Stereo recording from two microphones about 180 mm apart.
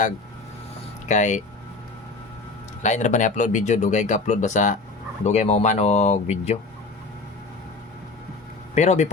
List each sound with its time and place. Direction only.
1.0 s speech: 40° left (ahead or behind)
2.8 s speech: 40° left (ahead or behind)
8.7 s speech: 40° left (ahead or behind)